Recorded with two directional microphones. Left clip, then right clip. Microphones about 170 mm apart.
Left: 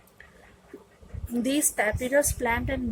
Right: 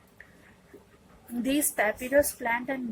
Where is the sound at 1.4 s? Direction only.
30° left (ahead or behind).